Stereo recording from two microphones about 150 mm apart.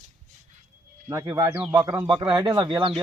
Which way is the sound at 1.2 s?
30° right (ahead or behind).